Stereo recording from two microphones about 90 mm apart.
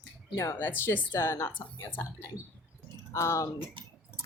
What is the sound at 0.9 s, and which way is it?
Speech, 25° left (ahead or behind).